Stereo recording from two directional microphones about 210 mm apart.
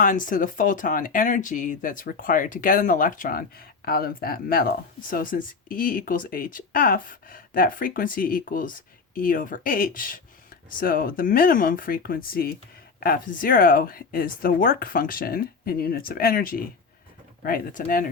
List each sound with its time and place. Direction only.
0.0 s speech: 40° left (ahead or behind)